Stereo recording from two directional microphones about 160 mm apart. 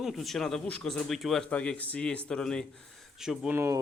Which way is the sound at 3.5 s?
15° right (ahead or behind).